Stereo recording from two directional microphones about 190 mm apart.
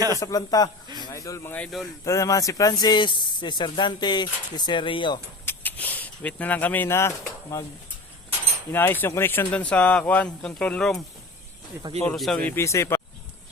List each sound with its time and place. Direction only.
0.2 s speech: 20° left (ahead or behind); by 1.9 s 5° left (ahead or behind)
2.0 s speech: 15° left (ahead or behind)
5.5 s speech: 10° left (ahead or behind)
8.7 s speech: 10° left (ahead or behind)
12.0 s speech: centre (ahead or behind)